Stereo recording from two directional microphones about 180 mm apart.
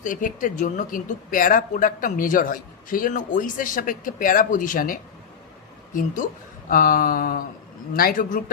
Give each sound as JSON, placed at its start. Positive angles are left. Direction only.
{"t": 0.0, "sound": "speech", "side_deg": 45}
{"t": 6.7, "sound": "speech", "side_deg": 50}